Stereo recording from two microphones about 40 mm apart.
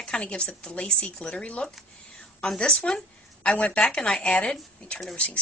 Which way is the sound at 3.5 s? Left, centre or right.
Left.